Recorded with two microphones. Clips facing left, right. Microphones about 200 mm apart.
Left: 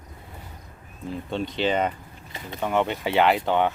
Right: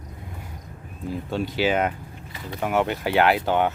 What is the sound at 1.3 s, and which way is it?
Speech, 5° right (ahead or behind).